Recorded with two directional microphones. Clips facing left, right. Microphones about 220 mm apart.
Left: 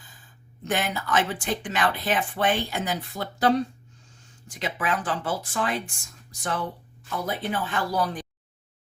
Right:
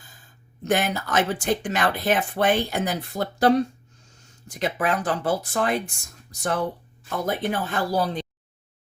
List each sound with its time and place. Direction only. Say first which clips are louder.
0.6 s speech: right 4 dB; 40° right (ahead or behind)
4.5 s speech: right 4 dB; 40° right (ahead or behind); by 8.3 s 25° right (ahead or behind)